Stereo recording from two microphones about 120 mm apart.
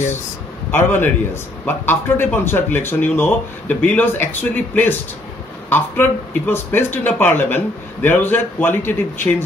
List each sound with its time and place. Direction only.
0.7 s a man's voice: 15° left (ahead or behind)